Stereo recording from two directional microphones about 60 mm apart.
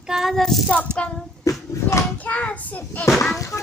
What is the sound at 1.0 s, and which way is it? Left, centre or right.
Speech, centre.